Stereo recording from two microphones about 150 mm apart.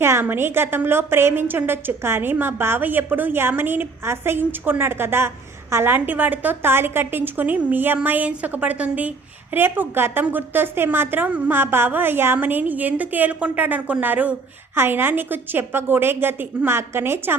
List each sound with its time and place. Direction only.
0.0 s a woman's voice: 15° right (ahead or behind)